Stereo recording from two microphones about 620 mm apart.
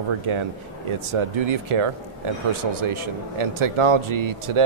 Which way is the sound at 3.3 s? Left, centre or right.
Right.